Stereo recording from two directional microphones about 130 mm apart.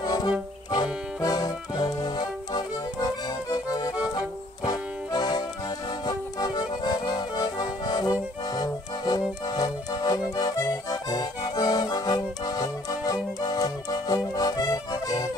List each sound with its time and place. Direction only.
0.0 s music: 30° left (ahead or behind)
1.2 s accordion: 30° left (ahead or behind)